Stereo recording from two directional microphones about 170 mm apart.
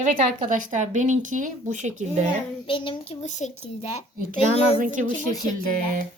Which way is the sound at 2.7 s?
30° left (ahead or behind).